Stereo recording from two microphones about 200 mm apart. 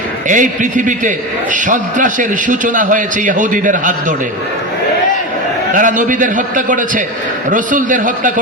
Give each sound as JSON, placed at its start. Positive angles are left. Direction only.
{"t": 0.3, "sound": "a man's voice", "side_deg": -40}
{"t": 5.7, "sound": "a man's voice", "side_deg": -40}